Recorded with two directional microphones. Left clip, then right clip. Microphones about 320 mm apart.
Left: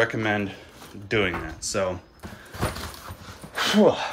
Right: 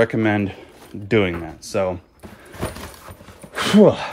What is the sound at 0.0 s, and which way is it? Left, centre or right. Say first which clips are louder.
Speech: right 5 dB; centre.